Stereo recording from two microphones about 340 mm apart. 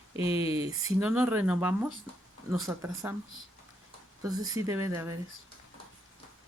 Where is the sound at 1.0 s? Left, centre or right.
Centre.